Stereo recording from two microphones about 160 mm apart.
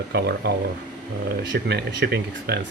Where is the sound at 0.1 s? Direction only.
90° right.